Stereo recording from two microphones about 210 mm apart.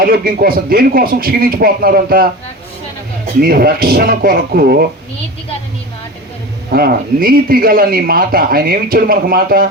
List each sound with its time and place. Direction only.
0.0 s speech: 45° right (ahead or behind)
3.4 s speech: 45° right (ahead or behind)
6.7 s speech: 45° right (ahead or behind)